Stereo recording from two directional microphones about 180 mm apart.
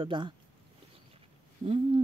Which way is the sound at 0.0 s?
25° right (ahead or behind).